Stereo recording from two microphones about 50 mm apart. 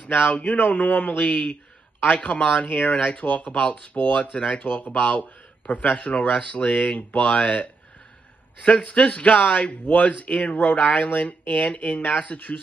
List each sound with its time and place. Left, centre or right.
0.1 s a man's voice: left
4.3 s a man's voice: centre
4.7 s a man's voice: left
8.6 s a man's voice: left